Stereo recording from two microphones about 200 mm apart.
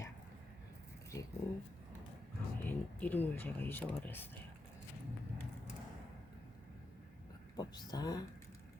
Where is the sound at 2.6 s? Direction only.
10° left (ahead or behind).